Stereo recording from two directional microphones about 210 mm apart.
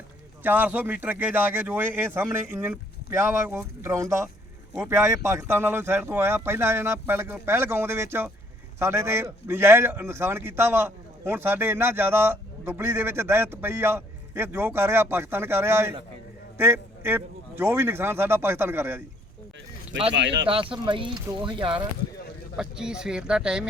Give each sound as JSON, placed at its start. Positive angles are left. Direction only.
{"t": 0.4, "sound": "a man's voice", "side_deg": -10}
{"t": 20.1, "sound": "speech", "side_deg": -55}
{"t": 20.5, "sound": "speech", "side_deg": -25}
{"t": 22.5, "sound": "speech", "side_deg": -5}